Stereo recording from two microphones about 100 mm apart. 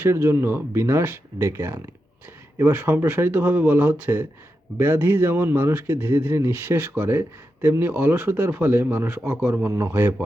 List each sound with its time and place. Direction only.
0.0 s a man's voice: 25° right (ahead or behind)